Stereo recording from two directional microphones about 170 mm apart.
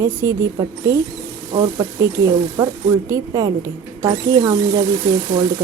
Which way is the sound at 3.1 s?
20° right (ahead or behind).